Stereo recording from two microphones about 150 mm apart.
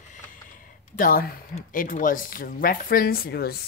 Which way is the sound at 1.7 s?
65° left (ahead or behind).